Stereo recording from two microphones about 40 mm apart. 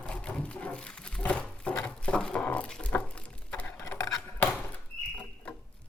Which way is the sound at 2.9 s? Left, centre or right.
Left.